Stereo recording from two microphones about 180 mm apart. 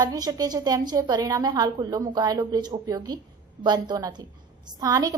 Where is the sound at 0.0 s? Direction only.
20° right (ahead or behind).